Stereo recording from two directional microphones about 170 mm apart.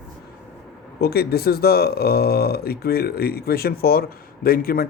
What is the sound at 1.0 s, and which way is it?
Speech, 70° left (ahead or behind).